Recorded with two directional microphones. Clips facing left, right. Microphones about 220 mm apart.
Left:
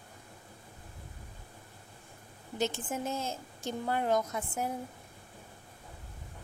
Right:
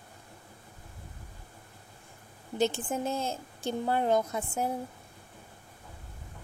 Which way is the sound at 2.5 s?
30° right (ahead or behind).